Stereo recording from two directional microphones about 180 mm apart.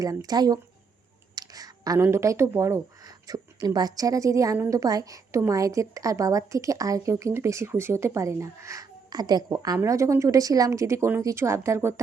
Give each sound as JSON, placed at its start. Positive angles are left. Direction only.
{"t": 0.0, "sound": "speech", "side_deg": -20}